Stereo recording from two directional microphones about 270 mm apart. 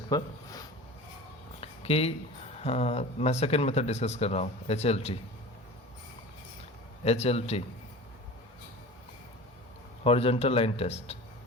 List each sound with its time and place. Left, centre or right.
0.1 s speech: centre
1.6 s a sound: left
2.6 s speech: left
7.0 s speech: left
10.0 s speech: left